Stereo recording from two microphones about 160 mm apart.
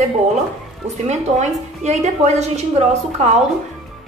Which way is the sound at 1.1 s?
45° right (ahead or behind).